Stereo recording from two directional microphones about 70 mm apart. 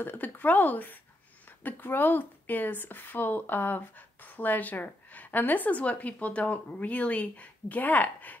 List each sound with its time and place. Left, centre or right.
0.0 s speech: left